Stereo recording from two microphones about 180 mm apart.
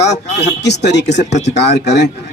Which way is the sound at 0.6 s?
70° left (ahead or behind).